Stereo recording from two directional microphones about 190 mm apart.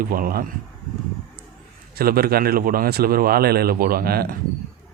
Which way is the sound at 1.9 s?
50° right (ahead or behind).